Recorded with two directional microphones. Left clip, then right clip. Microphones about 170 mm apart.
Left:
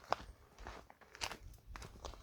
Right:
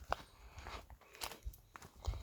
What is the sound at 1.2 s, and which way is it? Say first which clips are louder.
Walk: left 3 dB; 20° right (ahead or behind).